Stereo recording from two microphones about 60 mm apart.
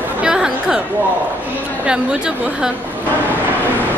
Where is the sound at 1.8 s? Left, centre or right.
Centre.